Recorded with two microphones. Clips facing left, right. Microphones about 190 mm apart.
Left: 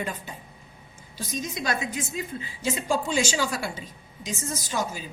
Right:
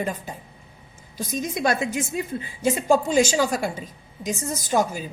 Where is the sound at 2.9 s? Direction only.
45° right (ahead or behind).